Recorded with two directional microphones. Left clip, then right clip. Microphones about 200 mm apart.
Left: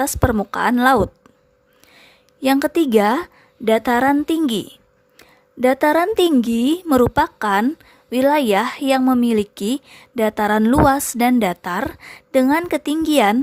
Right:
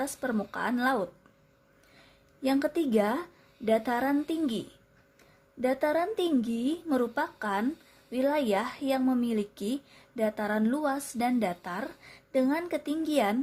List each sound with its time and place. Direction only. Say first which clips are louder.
0.0 s a woman's voice: left 13 dB; 40° left (ahead or behind)